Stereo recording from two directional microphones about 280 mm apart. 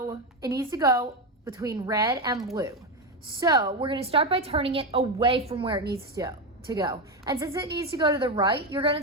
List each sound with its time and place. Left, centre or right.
0.1 s a woman's voice: centre